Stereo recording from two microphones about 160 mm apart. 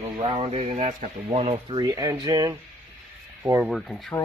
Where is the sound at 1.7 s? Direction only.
25° right (ahead or behind).